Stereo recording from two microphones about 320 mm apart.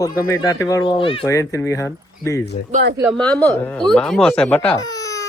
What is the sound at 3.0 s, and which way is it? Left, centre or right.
Speech, centre.